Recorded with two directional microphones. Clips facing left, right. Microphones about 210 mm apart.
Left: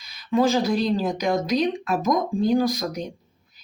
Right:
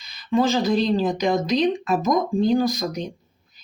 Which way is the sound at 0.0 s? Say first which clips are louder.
Even; 5° left (ahead or behind).